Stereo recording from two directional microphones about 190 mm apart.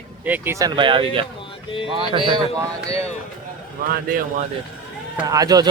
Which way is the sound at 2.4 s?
30° left (ahead or behind).